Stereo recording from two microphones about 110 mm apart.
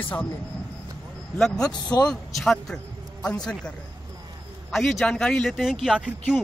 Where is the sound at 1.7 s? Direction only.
40° left (ahead or behind).